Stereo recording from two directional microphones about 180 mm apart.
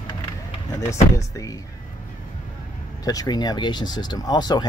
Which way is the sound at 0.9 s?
20° left (ahead or behind).